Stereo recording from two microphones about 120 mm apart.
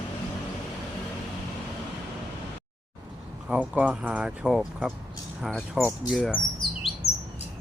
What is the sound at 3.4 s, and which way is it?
Speech, 15° right (ahead or behind).